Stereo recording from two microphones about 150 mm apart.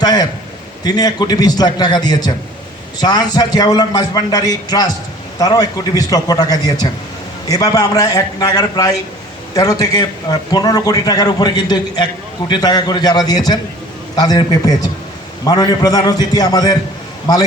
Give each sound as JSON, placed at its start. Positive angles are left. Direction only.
{"t": 0.0, "sound": "a man's voice", "side_deg": 25}